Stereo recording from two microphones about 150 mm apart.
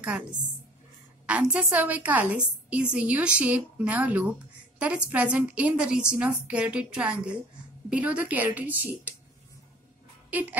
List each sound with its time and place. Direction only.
1.2 s a woman's voice: 10° right (ahead or behind)